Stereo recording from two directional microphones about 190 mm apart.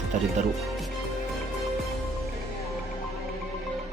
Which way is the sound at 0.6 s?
Centre (ahead or behind).